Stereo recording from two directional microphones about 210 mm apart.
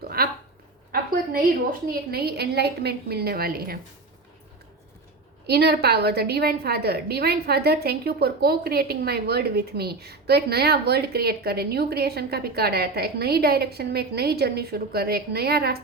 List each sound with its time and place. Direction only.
0.2 s a sound: 50° right (ahead or behind)
1.9 s a woman's voice: 45° right (ahead or behind)
5.5 s a woman's voice: 50° right (ahead or behind)